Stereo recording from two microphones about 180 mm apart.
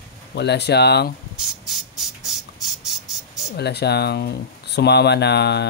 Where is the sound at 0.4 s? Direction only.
70° left (ahead or behind).